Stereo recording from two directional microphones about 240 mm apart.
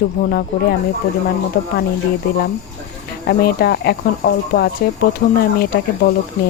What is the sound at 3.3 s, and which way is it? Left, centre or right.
Speech, left.